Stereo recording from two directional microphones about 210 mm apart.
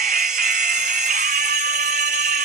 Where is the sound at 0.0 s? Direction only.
40° right (ahead or behind).